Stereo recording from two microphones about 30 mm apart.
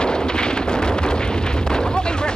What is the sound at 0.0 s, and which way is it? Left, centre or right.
Artillery fire, left.